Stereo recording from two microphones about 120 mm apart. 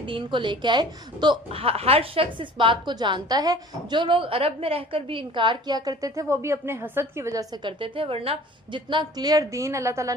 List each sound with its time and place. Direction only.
0.0 s a woman's voice: 45° right (ahead or behind)
1.5 s a woman's voice: 55° right (ahead or behind); by 7.4 s 25° right (ahead or behind)
7.5 s a woman's voice: 45° right (ahead or behind); by 10.2 s 25° right (ahead or behind)